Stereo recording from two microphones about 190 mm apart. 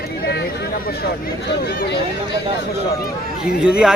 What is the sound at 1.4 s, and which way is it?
Speech, 60° left (ahead or behind).